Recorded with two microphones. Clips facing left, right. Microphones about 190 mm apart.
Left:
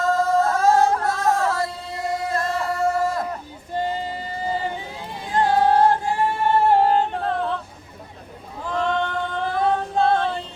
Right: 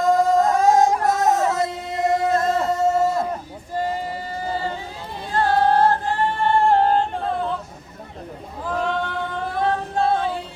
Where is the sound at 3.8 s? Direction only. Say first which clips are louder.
Right 1 dB; 20° left (ahead or behind).